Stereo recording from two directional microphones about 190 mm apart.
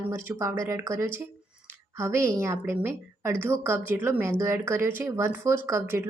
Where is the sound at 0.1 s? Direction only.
15° right (ahead or behind).